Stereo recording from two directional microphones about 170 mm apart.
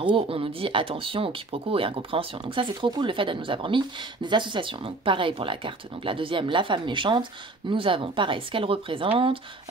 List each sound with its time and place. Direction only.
0.0 s speech: 30° right (ahead or behind)